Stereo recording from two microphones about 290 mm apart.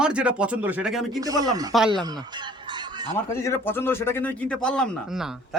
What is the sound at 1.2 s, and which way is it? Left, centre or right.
Speech, centre.